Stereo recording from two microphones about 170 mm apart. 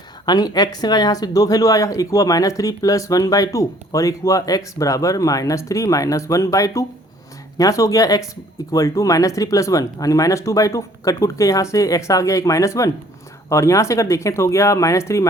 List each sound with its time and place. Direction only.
0.3 s a woman's voice: 20° left (ahead or behind)